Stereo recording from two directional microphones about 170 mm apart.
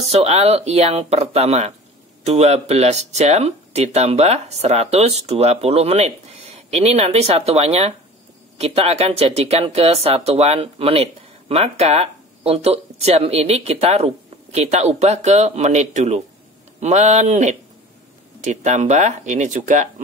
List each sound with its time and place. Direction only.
0.0 s speech: 35° right (ahead or behind)